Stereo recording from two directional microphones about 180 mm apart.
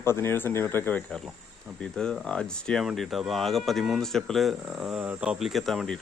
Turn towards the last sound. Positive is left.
turn(degrees=0)  # may be behind; listen again after turning